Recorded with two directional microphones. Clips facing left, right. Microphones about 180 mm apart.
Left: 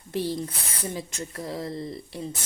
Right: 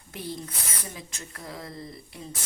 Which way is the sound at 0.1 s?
30° left (ahead or behind).